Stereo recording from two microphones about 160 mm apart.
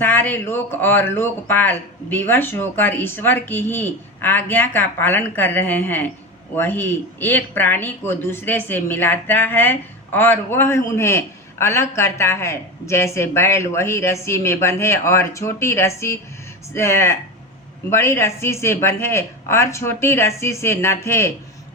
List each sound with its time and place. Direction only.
0.0 s speech: 10° left (ahead or behind)